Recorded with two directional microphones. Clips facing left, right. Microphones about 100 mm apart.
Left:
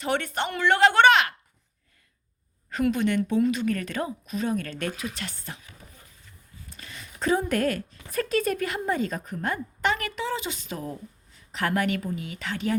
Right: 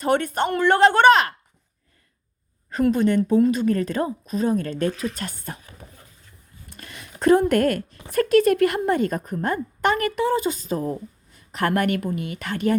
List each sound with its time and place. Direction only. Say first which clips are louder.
0.0 s a woman's voice: right 6 dB; 45° right (ahead or behind)
2.7 s speech: right 5 dB; 40° right (ahead or behind)
6.7 s a woman's voice: right 3 dB; 60° right (ahead or behind); by 10.9 s 40° right (ahead or behind)
11.3 s a woman's voice: right 4 dB; 55° right (ahead or behind)